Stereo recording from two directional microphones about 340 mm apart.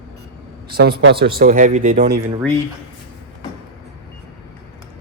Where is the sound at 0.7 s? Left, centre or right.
Right.